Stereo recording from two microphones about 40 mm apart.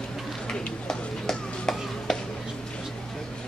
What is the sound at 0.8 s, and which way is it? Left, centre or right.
Music, centre.